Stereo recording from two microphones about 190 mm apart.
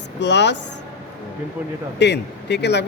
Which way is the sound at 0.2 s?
65° left (ahead or behind).